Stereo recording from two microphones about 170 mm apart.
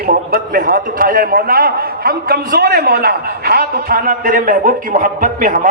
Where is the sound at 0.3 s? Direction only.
55° right (ahead or behind).